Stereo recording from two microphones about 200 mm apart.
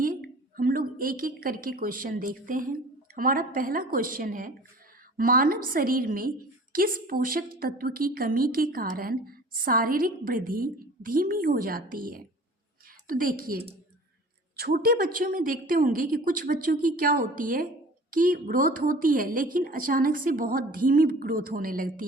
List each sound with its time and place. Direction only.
0.0 s a woman's voice: 45° right (ahead or behind)